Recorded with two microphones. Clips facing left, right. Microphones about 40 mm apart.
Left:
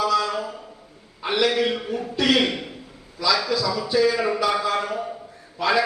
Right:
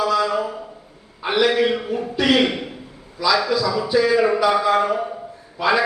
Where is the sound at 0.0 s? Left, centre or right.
Centre.